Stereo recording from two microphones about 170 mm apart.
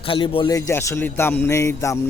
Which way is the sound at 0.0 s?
30° left (ahead or behind).